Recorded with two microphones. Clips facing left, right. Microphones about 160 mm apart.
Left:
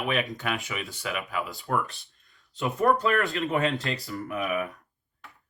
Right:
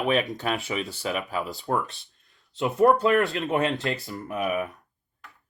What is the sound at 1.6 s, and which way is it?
Speech, 20° right (ahead or behind).